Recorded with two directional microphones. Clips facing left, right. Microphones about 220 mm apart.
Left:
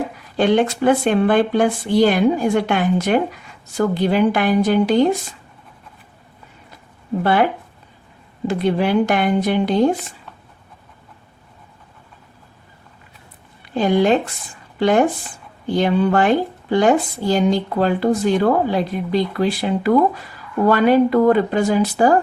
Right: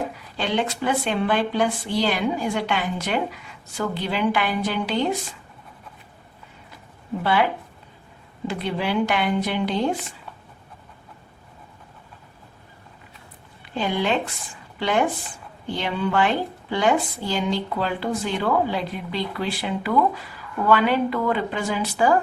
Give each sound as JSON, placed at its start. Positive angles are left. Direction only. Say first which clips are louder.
{"t": 0.3, "sound": "speech", "louder": "left 9 dB", "side_deg": 50}
{"t": 7.2, "sound": "speech", "louder": "left 5 dB", "side_deg": 50}
{"t": 8.4, "sound": "speech", "louder": "left 8 dB", "side_deg": 45}
{"t": 13.7, "sound": "speech", "louder": "left 8 dB", "side_deg": 45}